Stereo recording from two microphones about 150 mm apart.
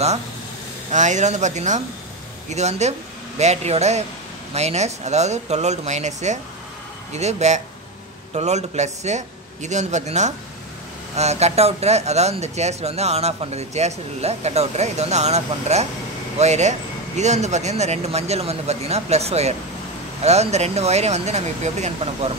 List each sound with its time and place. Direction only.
0.9 s speech: 55° right (ahead or behind)